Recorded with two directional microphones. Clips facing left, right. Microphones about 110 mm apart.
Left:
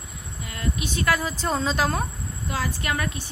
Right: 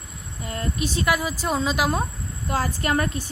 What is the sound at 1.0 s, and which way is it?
A woman's voice, 15° right (ahead or behind).